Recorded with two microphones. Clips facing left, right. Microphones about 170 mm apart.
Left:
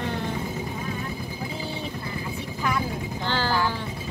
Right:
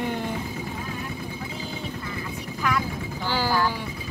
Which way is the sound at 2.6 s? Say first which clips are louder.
Right 1 dB; 25° left (ahead or behind).